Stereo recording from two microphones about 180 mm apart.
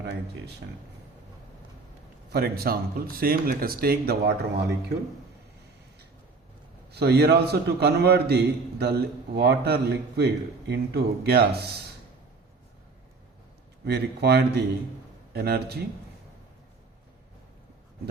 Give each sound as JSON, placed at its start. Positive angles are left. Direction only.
{"t": 2.3, "sound": "a man's voice", "side_deg": -55}
{"t": 6.9, "sound": "a man's voice", "side_deg": -65}
{"t": 13.8, "sound": "a man's voice", "side_deg": -65}